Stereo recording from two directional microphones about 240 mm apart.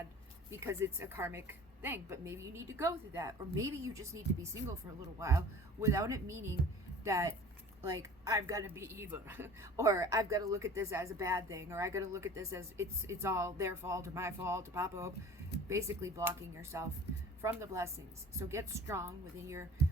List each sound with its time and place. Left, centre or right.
0.6 s a woman's voice: centre
5.8 s a woman's voice: centre